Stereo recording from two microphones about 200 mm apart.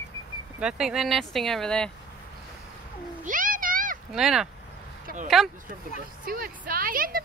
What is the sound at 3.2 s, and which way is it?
Cat, 40° right (ahead or behind).